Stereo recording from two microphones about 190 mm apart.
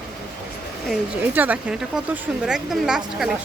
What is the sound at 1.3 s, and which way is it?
A woman's voice, 10° right (ahead or behind).